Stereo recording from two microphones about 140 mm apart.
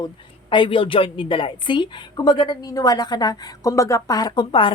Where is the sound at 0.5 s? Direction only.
35° left (ahead or behind).